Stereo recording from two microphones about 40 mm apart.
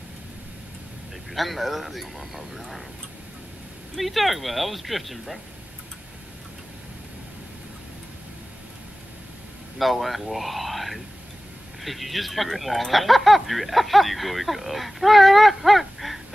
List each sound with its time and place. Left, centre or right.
1.3 s speech: centre
3.9 s speech: centre
9.8 s speech: centre